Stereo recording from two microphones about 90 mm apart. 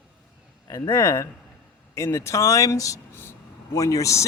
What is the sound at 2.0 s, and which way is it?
Speech, 30° left (ahead or behind).